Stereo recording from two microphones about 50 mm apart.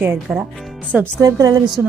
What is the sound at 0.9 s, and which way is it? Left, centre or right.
Speech, right.